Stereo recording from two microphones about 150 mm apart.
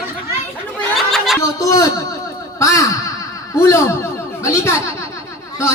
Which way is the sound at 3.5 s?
20° left (ahead or behind).